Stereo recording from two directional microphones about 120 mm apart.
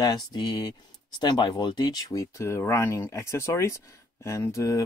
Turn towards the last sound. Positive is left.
turn(degrees=30)  # may be behind; listen again after turning